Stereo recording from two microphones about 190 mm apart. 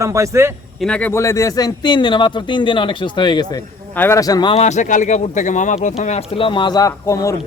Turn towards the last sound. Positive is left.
turn(degrees=15)  # may be behind; listen again after turning